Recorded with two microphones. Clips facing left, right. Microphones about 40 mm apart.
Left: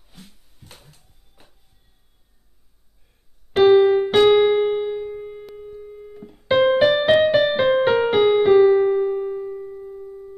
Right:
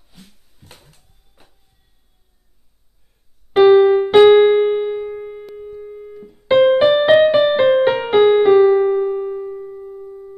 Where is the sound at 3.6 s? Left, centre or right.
Centre.